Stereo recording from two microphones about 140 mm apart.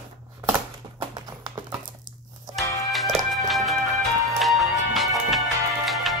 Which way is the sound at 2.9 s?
Centre (ahead or behind).